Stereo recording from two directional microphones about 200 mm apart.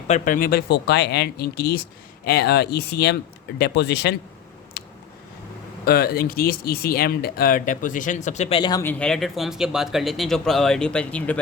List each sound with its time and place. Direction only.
0.1 s speech: 45° left (ahead or behind); by 4.1 s 60° left (ahead or behind)
4.8 s a sound: 55° left (ahead or behind)
5.8 s speech: 50° left (ahead or behind); by 8.8 s 25° left (ahead or behind)
8.8 s speech: 5° left (ahead or behind)